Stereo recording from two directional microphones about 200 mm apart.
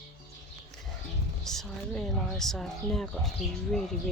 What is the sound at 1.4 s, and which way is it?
Speech, centre (ahead or behind).